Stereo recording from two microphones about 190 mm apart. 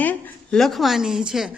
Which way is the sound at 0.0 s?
5° left (ahead or behind).